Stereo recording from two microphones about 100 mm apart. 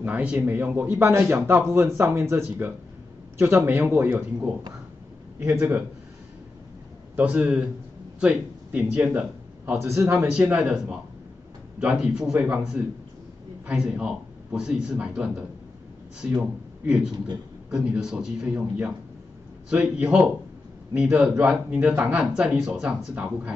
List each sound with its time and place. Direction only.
0.0 s speech: 15° right (ahead or behind)
5.6 s speech: 20° right (ahead or behind)
7.2 s speech: 15° right (ahead or behind)
9.7 s speech: 25° right (ahead or behind)
10.1 s a man's voice: 10° right (ahead or behind)
16.3 s speech: 10° right (ahead or behind)